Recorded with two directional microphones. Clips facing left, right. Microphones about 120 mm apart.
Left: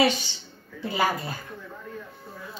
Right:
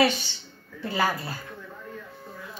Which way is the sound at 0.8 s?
15° left (ahead or behind).